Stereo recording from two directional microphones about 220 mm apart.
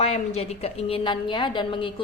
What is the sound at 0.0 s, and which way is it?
A woman's voice, 30° left (ahead or behind).